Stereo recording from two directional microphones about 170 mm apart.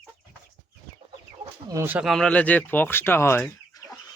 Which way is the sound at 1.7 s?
15° right (ahead or behind).